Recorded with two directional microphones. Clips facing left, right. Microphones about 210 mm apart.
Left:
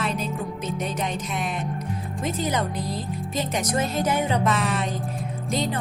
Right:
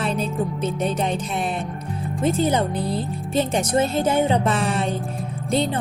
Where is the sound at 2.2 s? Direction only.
30° right (ahead or behind).